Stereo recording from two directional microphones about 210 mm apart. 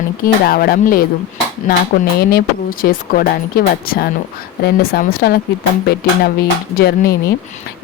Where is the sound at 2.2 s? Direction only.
45° left (ahead or behind).